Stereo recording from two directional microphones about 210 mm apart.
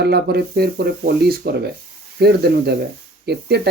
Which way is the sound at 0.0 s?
50° right (ahead or behind).